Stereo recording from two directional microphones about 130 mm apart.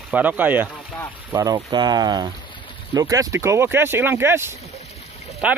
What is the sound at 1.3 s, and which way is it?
Speech, 30° right (ahead or behind).